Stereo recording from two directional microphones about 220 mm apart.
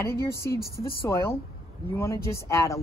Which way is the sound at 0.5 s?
45° left (ahead or behind).